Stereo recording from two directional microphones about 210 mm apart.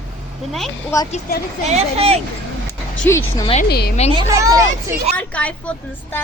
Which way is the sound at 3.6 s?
50° left (ahead or behind).